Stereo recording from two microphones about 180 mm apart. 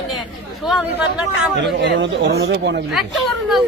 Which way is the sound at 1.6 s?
85° right.